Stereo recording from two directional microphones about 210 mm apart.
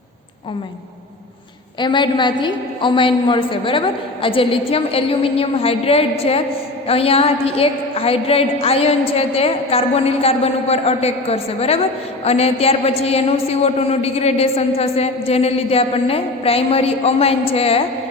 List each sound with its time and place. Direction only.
1.8 s a man's voice: 20° left (ahead or behind)